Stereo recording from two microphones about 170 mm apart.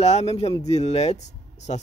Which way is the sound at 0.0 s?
40° left (ahead or behind).